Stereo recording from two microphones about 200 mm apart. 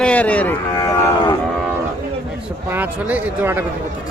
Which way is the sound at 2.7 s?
10° right (ahead or behind).